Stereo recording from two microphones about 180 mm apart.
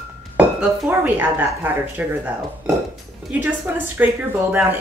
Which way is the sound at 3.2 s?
Centre (ahead or behind).